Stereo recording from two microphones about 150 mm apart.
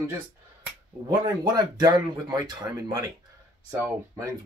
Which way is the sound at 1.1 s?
25° right (ahead or behind).